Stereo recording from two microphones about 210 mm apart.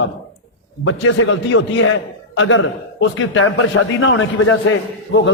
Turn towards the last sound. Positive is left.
turn(degrees=70)  # may be behind; listen again after turning